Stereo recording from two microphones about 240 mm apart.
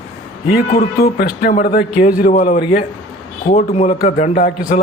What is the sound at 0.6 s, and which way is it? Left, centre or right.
A man's voice, left.